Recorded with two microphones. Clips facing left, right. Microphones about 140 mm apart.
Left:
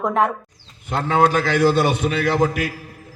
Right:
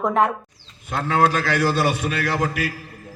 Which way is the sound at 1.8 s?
20° left (ahead or behind).